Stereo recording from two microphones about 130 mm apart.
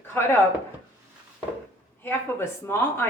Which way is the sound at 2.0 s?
20° left (ahead or behind).